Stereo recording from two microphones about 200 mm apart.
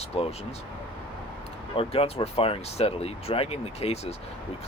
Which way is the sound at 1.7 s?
30° left (ahead or behind).